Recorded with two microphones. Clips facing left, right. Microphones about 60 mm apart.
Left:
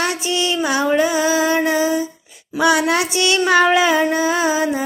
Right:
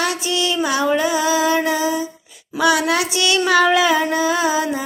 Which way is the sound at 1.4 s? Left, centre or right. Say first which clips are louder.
Left 1 dB; left.